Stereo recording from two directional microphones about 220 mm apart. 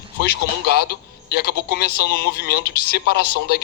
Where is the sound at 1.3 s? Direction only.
45° left (ahead or behind).